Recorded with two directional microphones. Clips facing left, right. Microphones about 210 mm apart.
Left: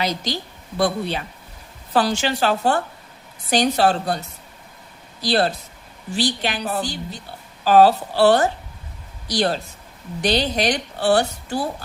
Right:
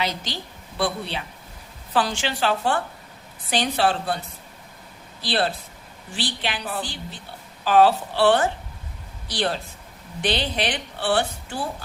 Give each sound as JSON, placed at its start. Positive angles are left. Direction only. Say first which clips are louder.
{"t": 0.0, "sound": "a woman's voice", "louder": "left 4 dB", "side_deg": 40}
{"t": 5.2, "sound": "a woman's voice", "louder": "left 4 dB", "side_deg": 40}